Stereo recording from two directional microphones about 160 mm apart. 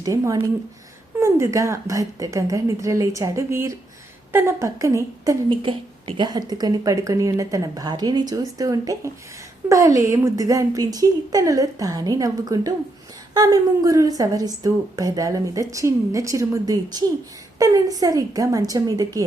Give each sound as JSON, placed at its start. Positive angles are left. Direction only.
{"t": 0.0, "sound": "a woman's voice", "side_deg": -20}
{"t": 5.5, "sound": "a woman's voice", "side_deg": -30}